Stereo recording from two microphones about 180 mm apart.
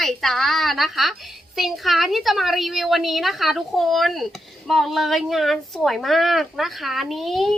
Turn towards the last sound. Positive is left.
turn(degrees=0)  # may be behind; listen again after turning